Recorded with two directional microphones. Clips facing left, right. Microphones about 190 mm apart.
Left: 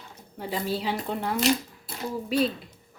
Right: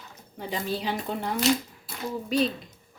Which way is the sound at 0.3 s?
5° left (ahead or behind).